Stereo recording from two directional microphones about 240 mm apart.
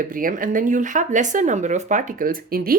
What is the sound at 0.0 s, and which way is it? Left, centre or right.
Speech, right.